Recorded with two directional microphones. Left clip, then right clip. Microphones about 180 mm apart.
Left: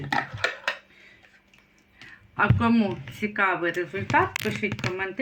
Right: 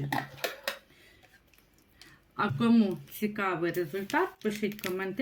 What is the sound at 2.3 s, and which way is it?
Speech, 30° right (ahead or behind).